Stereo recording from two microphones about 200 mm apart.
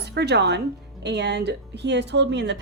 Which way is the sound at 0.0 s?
55° right (ahead or behind).